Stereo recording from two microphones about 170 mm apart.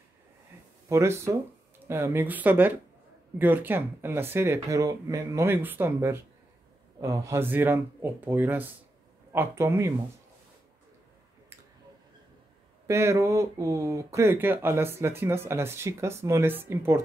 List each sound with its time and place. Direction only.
0.8 s speech: 15° right (ahead or behind)
12.8 s speech: 15° right (ahead or behind)